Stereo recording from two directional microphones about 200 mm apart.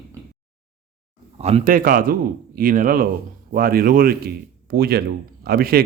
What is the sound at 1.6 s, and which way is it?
A man's voice, 45° right (ahead or behind).